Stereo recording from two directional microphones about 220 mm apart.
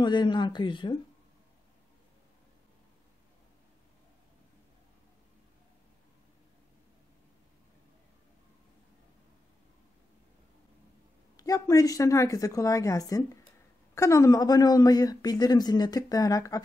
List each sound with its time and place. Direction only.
0.0 s speech: 20° left (ahead or behind)
11.3 s a man's voice: 15° left (ahead or behind)